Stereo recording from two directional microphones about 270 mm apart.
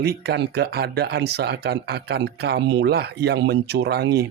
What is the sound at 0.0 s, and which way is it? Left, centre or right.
Speech, right.